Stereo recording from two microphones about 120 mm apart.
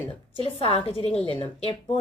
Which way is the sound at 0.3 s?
50° left (ahead or behind).